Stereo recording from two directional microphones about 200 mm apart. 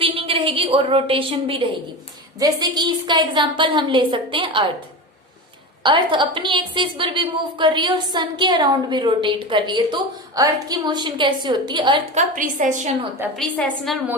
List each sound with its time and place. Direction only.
0.0 s a woman's voice: 25° right (ahead or behind)
5.8 s a woman's voice: 25° right (ahead or behind)
12.1 s a woman's voice: 40° right (ahead or behind)
13.3 s a woman's voice: centre (ahead or behind)